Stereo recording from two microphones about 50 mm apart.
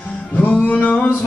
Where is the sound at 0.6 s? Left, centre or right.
Left.